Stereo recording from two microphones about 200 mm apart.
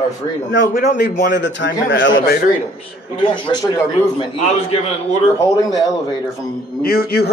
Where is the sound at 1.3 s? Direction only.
65° left (ahead or behind).